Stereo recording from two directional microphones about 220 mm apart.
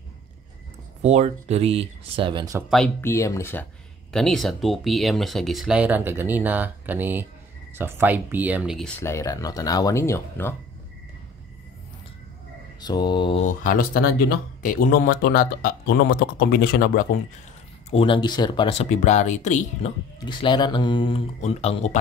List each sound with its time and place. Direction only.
1.0 s speech: 30° right (ahead or behind)
2.7 s speech: 5° left (ahead or behind)
9.0 s speech: 15° left (ahead or behind)
12.8 s speech: 20° left (ahead or behind)
13.5 s speech: 35° left (ahead or behind)
17.8 s speech: 25° left (ahead or behind)
20.2 s speech: 20° left (ahead or behind)